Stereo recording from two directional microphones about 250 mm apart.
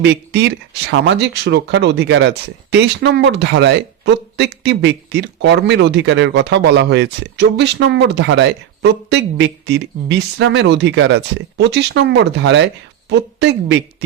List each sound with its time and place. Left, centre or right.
0.0 s speech: right